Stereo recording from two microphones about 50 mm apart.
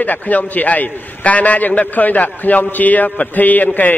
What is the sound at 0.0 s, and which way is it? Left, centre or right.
A man's voice, left.